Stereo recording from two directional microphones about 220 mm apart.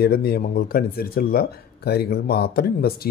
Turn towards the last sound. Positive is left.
turn(degrees=45)  # may be behind; listen again after turning